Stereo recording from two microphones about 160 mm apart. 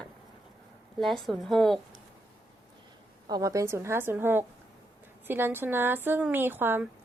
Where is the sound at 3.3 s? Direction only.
20° right (ahead or behind).